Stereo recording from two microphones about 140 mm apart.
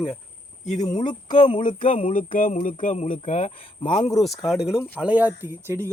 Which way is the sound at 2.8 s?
55° left (ahead or behind).